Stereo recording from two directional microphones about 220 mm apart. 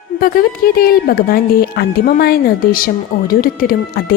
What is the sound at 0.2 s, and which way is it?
Speech, 40° left (ahead or behind).